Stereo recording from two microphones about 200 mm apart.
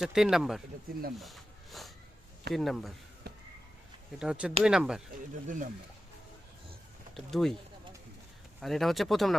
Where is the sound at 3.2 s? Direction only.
55° right (ahead or behind).